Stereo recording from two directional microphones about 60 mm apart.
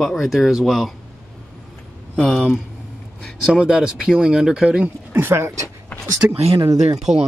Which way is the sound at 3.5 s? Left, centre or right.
Centre.